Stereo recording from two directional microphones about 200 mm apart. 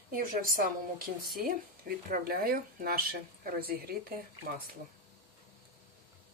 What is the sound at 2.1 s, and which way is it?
Speech, 45° right (ahead or behind).